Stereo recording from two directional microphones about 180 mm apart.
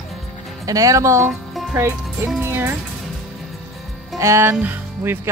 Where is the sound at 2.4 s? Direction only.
10° right (ahead or behind).